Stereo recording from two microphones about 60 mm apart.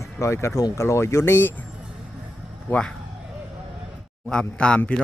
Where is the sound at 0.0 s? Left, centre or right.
Left.